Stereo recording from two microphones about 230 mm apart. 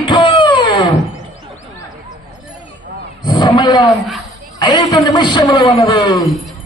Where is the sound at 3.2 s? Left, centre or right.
Centre.